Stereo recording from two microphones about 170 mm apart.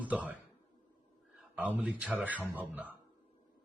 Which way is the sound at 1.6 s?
10° right (ahead or behind).